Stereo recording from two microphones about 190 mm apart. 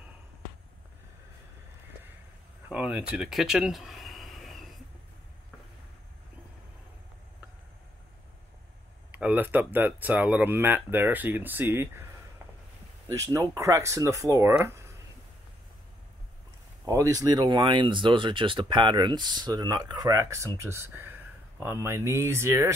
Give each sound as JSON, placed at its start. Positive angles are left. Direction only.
{"t": 2.7, "sound": "a sound", "side_deg": -5}
{"t": 9.1, "sound": "speech", "side_deg": -10}
{"t": 13.1, "sound": "speech", "side_deg": -15}
{"t": 16.8, "sound": "speech", "side_deg": -20}